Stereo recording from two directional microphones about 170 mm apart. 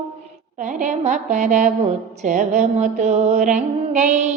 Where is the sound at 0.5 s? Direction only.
45° right (ahead or behind).